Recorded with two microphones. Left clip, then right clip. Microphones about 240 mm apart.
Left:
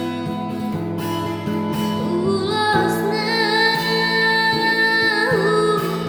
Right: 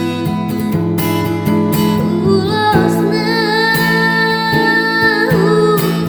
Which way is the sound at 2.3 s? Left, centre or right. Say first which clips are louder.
Right 6 dB; centre.